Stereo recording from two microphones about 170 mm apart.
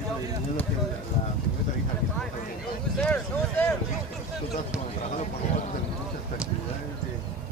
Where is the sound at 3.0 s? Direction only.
10° left (ahead or behind).